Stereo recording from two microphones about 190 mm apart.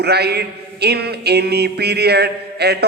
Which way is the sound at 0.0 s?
60° right (ahead or behind).